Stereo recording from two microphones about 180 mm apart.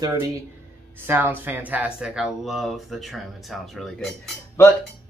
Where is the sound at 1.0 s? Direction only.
10° right (ahead or behind).